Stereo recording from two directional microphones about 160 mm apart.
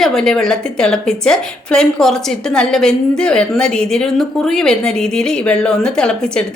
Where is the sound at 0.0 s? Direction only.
5° left (ahead or behind).